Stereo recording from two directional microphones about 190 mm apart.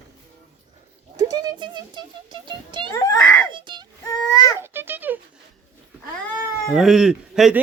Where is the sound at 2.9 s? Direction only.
15° left (ahead or behind).